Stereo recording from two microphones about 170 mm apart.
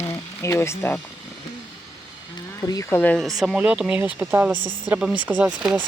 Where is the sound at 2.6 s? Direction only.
20° left (ahead or behind).